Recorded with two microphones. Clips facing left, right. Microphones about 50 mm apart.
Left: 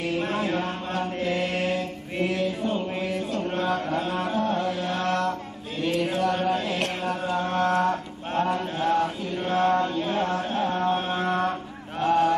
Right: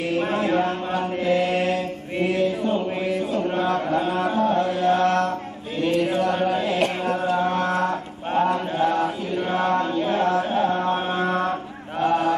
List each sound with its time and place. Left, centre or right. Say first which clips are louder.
0.2 s mantra: right 5 dB; centre
3.2 s chant: right 4 dB; centre
3.6 s mantra: right 2 dB; centre
4.0 s music: right 4 dB; centre
5.8 s mantra: right 4 dB; centre
6.3 s a sound: right 3 dB; centre
7.2 s mantra: right 1 dB; centre
8.3 s chant: right 4 dB; centre
12.0 s a sound: right 1 dB; centre